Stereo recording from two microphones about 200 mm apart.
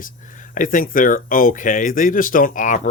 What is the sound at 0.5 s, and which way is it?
Speech, 40° left (ahead or behind).